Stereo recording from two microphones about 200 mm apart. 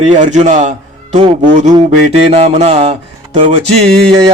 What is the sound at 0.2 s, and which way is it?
Mantra, 35° right (ahead or behind).